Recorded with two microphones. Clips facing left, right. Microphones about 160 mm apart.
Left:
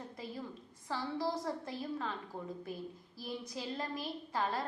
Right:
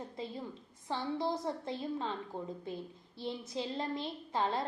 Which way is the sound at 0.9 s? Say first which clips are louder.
Right 2 dB; 20° right (ahead or behind).